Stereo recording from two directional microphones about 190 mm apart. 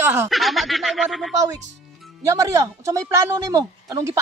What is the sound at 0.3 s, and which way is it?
Speech, centre (ahead or behind).